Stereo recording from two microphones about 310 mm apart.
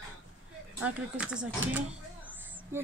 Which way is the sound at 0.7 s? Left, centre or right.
Centre.